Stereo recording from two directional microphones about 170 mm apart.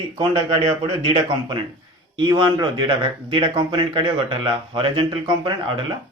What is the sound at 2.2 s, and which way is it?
Speech, 25° right (ahead or behind).